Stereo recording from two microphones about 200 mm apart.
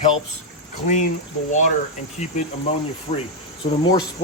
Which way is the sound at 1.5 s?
40° left (ahead or behind).